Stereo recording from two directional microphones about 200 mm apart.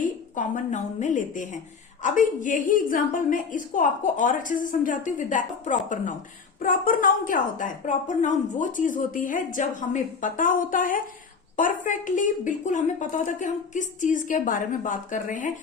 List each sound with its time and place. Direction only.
0.0 s a woman's voice: 40° left (ahead or behind)